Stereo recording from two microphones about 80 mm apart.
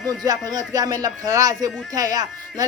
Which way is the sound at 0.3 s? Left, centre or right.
Right.